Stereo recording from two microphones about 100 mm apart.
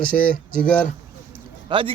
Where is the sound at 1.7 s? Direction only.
60° right (ahead or behind).